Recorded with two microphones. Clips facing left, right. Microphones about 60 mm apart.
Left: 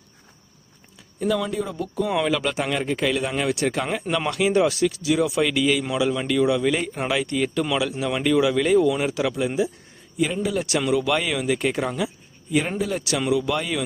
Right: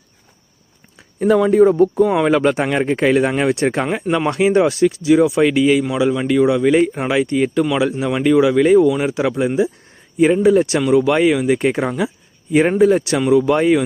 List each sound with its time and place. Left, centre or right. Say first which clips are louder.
1.2 s speech: right 12 dB; right
2.0 s speech: right 7 dB; centre
2.3 s speech: right 8 dB; right